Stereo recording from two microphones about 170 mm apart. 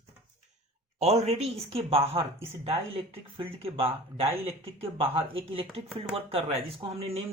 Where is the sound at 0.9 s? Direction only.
40° right (ahead or behind).